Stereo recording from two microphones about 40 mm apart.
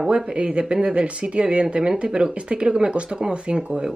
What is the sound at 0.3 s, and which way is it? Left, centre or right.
Speech, right.